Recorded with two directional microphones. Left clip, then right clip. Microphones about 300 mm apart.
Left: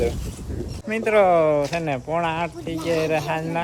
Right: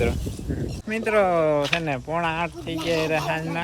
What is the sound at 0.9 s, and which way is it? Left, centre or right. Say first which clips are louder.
Speech: left 3 dB; centre.